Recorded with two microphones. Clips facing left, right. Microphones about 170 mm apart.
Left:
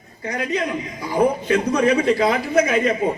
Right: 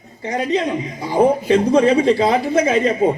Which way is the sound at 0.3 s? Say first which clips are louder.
Right 4 dB; 25° right (ahead or behind).